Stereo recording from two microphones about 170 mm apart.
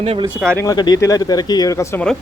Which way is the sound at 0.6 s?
25° left (ahead or behind).